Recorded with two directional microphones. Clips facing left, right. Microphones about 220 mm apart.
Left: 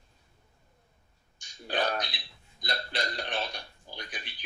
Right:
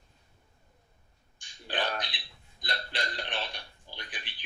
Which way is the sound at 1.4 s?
45° left (ahead or behind).